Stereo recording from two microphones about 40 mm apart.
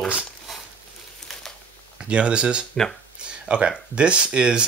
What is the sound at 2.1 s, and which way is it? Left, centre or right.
Speech, right.